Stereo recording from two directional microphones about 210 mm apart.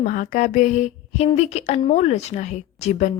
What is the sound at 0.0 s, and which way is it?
Speech, 40° left (ahead or behind).